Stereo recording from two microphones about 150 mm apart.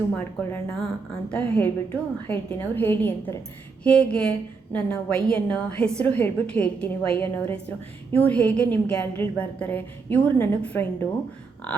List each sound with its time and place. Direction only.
0.2 s a woman's voice: 15° left (ahead or behind)